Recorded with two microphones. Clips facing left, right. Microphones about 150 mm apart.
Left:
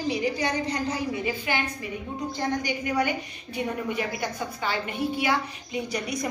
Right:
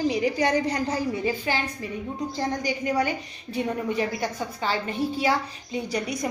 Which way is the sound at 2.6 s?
35° right (ahead or behind).